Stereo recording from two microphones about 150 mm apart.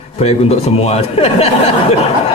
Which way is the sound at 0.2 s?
45° left (ahead or behind).